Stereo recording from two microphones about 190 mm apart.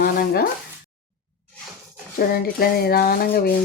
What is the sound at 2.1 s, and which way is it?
Speech, 55° left (ahead or behind).